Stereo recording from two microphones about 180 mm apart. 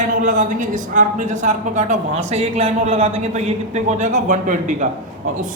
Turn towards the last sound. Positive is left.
turn(degrees=-45)  # may be behind; listen again after turning